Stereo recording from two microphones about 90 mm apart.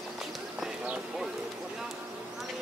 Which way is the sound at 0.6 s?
15° right (ahead or behind).